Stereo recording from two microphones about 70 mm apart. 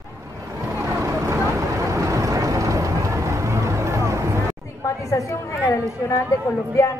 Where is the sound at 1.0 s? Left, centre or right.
Right.